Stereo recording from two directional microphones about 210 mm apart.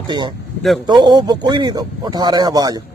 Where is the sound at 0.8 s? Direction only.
20° right (ahead or behind).